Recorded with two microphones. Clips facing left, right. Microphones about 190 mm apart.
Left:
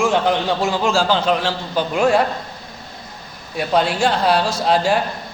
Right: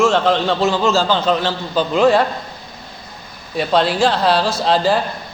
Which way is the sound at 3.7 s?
10° left (ahead or behind).